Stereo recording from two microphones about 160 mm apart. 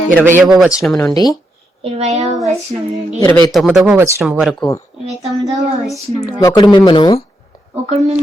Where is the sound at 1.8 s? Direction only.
45° right (ahead or behind).